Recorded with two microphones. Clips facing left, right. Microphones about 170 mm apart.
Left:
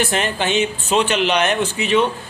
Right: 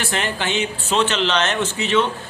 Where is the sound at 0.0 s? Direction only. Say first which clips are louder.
Left 4 dB; 20° left (ahead or behind).